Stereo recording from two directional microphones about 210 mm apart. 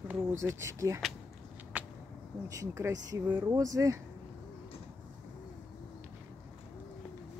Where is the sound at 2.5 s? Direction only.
15° right (ahead or behind).